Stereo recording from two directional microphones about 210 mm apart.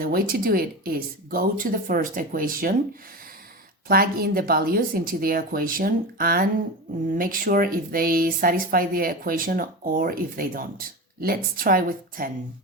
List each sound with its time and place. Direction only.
0.0 s speech: 45° right (ahead or behind)
3.8 s speech: 45° right (ahead or behind)